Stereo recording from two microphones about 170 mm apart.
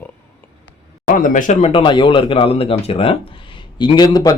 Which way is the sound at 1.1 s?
50° left (ahead or behind).